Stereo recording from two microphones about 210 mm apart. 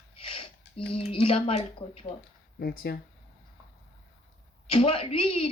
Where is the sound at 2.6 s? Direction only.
50° left (ahead or behind).